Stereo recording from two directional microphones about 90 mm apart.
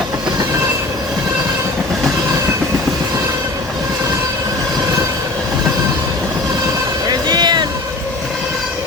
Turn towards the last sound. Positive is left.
turn(degrees=-55)  # may be behind; listen again after turning